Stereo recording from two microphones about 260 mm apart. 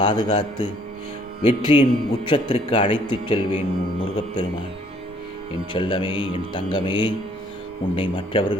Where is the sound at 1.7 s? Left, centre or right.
Centre.